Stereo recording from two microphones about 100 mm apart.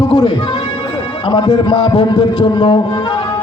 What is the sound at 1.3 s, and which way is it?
A man's voice, 50° left (ahead or behind).